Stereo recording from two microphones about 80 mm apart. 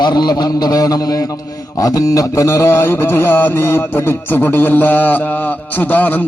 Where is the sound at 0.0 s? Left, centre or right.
Left.